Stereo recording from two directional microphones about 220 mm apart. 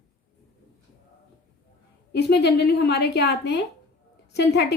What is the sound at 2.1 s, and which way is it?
A woman's voice, 50° left (ahead or behind).